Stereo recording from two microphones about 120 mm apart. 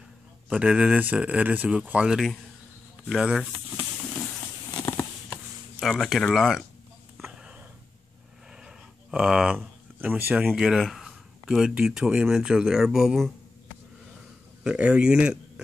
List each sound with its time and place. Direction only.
0.6 s speech: 10° right (ahead or behind)
4.6 s tearing: 25° left (ahead or behind)
5.8 s speech: centre (ahead or behind)
7.2 s a sound: centre (ahead or behind)
8.5 s speech: 5° right (ahead or behind)
14.6 s speech: 10° right (ahead or behind)